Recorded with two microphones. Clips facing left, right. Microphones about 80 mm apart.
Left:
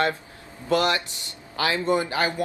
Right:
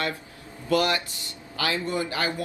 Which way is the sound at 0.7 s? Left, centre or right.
Left.